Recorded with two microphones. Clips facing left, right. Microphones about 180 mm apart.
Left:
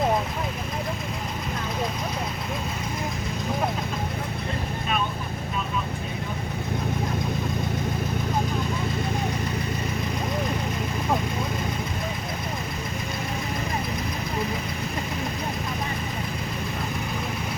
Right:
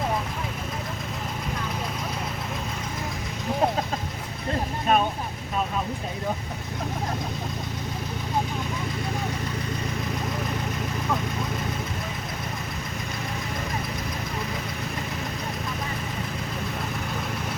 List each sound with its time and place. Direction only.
4.9 s vehicle: 45° right (ahead or behind)